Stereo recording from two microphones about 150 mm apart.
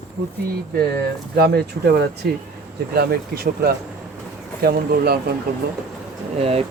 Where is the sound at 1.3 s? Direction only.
90° right.